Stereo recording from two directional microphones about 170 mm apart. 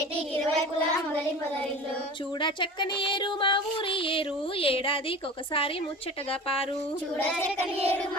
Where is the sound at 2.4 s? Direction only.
30° left (ahead or behind).